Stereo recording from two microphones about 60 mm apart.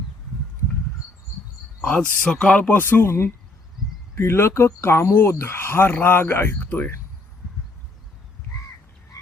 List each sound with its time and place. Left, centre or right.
1.8 s speech: left
2.6 s speech: left
2.8 s speech: left
9.1 s frog: left